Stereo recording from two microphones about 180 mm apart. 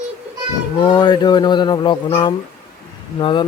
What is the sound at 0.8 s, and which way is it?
Speech, 25° left (ahead or behind).